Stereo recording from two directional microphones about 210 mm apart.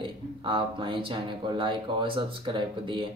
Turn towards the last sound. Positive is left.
turn(degrees=-25)  # may be behind; listen again after turning